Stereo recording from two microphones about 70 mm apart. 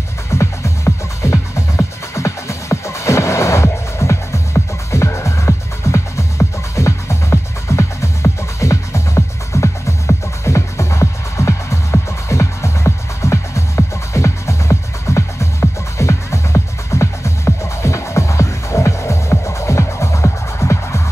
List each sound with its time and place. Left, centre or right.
0.3 s music: left